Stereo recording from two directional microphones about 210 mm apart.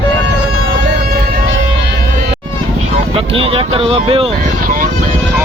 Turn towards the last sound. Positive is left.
turn(degrees=-25)  # may be behind; listen again after turning